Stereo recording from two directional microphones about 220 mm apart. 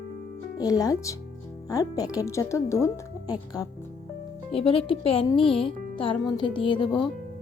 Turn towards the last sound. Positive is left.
turn(degrees=20)  # may be behind; listen again after turning